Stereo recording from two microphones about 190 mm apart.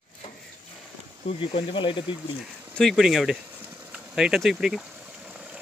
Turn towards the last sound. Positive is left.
turn(degrees=0)  # may be behind; listen again after turning